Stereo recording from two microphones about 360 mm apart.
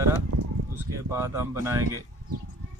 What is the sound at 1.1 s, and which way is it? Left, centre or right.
Speech, centre.